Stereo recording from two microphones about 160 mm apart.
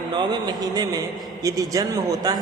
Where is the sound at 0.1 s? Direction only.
25° right (ahead or behind).